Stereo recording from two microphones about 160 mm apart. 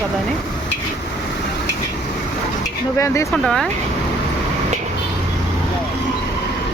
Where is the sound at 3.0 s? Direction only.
20° left (ahead or behind).